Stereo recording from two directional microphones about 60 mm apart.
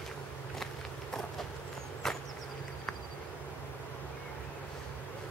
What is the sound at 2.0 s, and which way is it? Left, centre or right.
Chop, centre.